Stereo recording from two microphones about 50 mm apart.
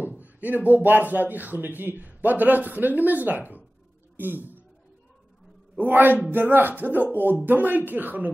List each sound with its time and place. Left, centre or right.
0.1 s speech: right
5.8 s speech: right